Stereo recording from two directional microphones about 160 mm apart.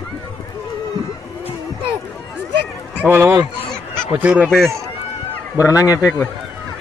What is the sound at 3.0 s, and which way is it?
Speech, 15° right (ahead or behind).